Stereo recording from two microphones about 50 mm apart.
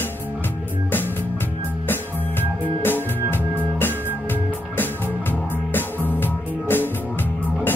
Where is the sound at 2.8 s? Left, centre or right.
Left.